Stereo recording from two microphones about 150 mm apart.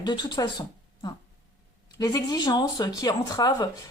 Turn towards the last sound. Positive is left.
turn(degrees=25)  # may be behind; listen again after turning